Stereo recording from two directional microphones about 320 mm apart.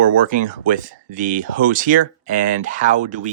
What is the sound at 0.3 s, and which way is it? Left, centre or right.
Speech, right.